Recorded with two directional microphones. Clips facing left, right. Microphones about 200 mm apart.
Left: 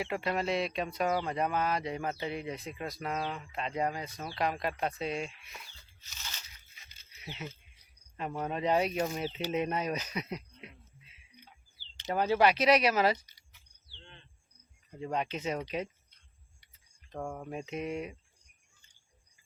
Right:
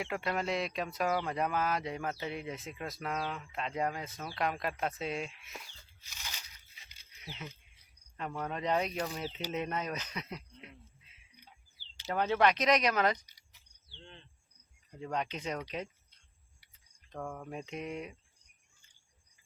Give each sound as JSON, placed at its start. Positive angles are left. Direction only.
{"t": 0.0, "sound": "speech", "side_deg": 0}
{"t": 6.0, "sound": "crunch", "side_deg": -10}
{"t": 8.1, "sound": "speech", "side_deg": 15}
{"t": 12.0, "sound": "speech", "side_deg": 5}
{"t": 13.5, "sound": "a sound", "side_deg": -35}
{"t": 14.9, "sound": "speech", "side_deg": 5}
{"t": 17.1, "sound": "speech", "side_deg": 10}